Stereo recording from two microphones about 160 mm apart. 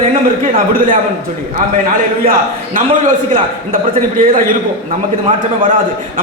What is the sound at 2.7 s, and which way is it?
A man's voice, 55° right (ahead or behind).